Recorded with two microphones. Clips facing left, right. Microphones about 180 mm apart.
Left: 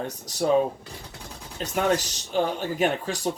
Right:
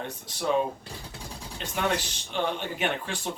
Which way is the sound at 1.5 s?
40° left (ahead or behind).